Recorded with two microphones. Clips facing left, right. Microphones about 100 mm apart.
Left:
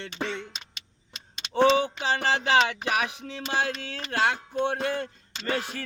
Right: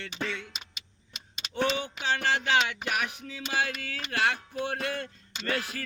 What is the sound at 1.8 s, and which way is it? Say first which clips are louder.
Music: left 3 dB; 35° left (ahead or behind).